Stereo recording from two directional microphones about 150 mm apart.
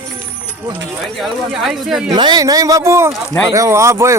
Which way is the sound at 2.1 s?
25° right (ahead or behind).